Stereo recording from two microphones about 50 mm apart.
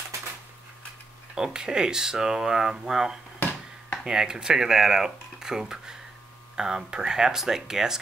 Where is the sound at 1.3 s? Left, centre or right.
Centre.